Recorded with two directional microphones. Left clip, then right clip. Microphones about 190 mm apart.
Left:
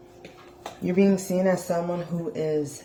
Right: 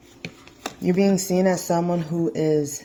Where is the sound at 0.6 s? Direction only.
45° right (ahead or behind).